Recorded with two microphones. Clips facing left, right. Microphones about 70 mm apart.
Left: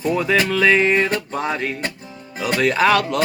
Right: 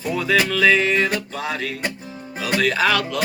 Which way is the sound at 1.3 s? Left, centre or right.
Left.